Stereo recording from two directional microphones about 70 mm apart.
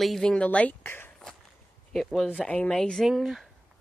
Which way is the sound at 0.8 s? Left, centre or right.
Left.